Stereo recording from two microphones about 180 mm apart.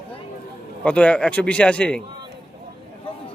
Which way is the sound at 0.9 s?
5° left (ahead or behind).